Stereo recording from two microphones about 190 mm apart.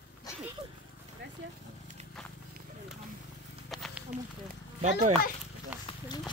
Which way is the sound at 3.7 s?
Centre (ahead or behind).